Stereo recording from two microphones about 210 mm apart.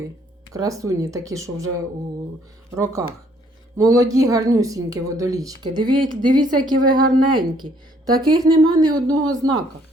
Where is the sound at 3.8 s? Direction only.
15° right (ahead or behind).